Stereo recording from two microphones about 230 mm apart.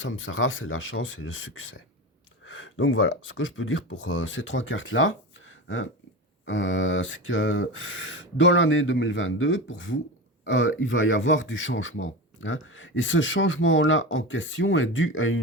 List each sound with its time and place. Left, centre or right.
0.0 s a man's voice: left